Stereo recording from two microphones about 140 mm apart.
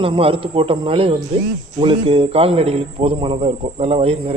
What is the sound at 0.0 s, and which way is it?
A man's voice, 40° right (ahead or behind).